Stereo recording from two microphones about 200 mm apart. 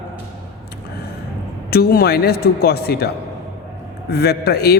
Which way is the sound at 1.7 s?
50° left (ahead or behind).